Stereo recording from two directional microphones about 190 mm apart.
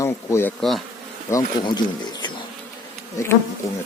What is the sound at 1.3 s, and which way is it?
Speech, 20° left (ahead or behind).